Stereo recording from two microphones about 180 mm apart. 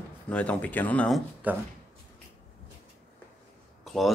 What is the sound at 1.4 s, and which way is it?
Speech, 10° right (ahead or behind).